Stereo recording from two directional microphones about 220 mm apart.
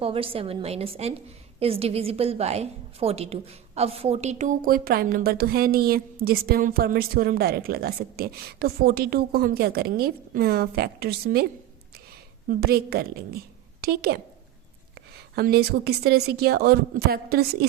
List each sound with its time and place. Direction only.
0.0 s a woman's voice: 25° right (ahead or behind); by 11.4 s 45° right (ahead or behind)
12.5 s a woman's voice: 45° right (ahead or behind)